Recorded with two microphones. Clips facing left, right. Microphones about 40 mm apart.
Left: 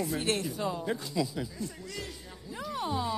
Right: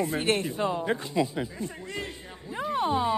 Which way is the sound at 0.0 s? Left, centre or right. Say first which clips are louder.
Right 4 dB; right.